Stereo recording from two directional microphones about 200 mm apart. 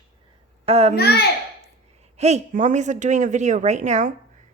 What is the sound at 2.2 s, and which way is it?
Speech, 35° right (ahead or behind).